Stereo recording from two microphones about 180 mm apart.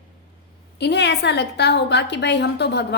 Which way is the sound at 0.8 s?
70° left (ahead or behind).